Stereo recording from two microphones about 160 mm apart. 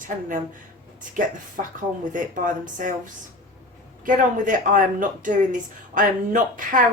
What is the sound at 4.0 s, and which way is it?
Speech, 55° right (ahead or behind).